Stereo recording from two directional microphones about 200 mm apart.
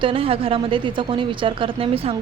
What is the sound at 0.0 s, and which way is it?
A woman's voice, 25° right (ahead or behind).